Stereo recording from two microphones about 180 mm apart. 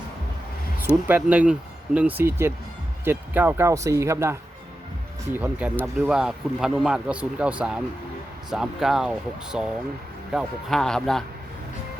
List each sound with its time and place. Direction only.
1.0 s speech: 10° right (ahead or behind)